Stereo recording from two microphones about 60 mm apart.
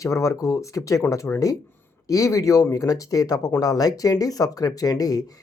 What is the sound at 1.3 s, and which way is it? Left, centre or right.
Speech, left.